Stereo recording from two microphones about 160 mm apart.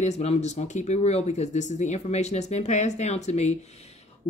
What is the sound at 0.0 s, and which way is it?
Speech, 45° left (ahead or behind).